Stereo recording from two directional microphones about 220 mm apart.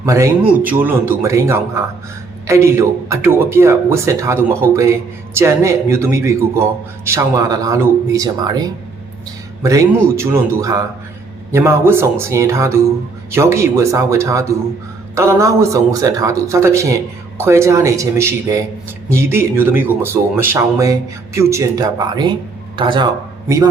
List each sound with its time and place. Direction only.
0.0 s a man's voice: 15° right (ahead or behind)